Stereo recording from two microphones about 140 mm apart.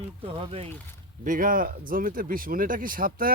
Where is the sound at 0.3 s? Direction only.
40° right (ahead or behind).